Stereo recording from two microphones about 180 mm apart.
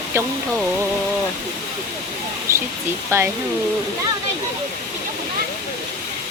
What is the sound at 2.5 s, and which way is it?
Speech, 15° right (ahead or behind).